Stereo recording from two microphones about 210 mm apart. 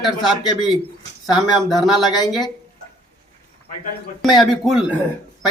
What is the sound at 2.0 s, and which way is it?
Speech, 20° left (ahead or behind).